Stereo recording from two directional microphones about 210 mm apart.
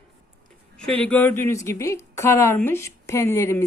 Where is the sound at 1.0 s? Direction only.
5° left (ahead or behind).